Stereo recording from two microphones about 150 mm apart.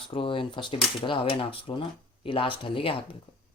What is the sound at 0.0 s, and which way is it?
Speech, 35° left (ahead or behind).